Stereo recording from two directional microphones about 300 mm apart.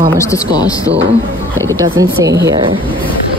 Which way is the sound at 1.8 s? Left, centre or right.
Centre.